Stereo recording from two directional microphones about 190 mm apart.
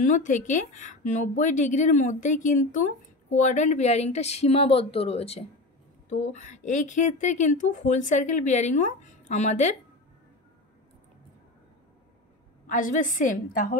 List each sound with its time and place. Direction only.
0.0 s a woman's voice: 40° left (ahead or behind)
12.6 s a woman's voice: 45° left (ahead or behind)